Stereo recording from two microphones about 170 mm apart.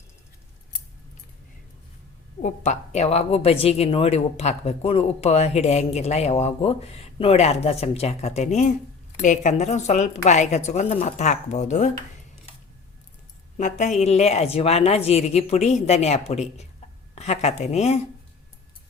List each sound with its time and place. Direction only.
2.4 s a woman's voice: 40° left (ahead or behind)
13.6 s a woman's voice: 45° left (ahead or behind)